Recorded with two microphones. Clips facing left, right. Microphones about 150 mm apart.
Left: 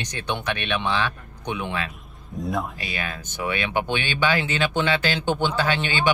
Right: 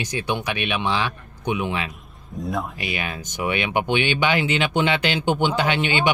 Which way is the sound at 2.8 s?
20° right (ahead or behind).